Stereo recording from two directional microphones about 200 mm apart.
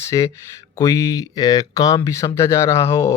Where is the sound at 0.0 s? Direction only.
15° left (ahead or behind).